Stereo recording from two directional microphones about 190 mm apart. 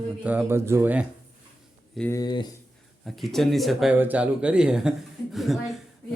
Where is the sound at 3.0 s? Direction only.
Centre (ahead or behind).